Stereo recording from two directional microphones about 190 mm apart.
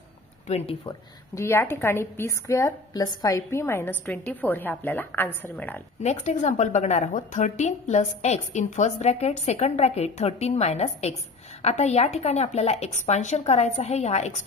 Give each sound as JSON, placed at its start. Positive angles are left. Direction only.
{"t": 0.5, "sound": "a woman's voice", "side_deg": 30}
{"t": 1.3, "sound": "a woman's voice", "side_deg": 15}
{"t": 6.0, "sound": "a woman's voice", "side_deg": 35}